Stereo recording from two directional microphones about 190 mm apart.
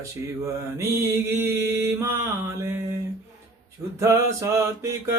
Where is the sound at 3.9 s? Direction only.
15° right (ahead or behind).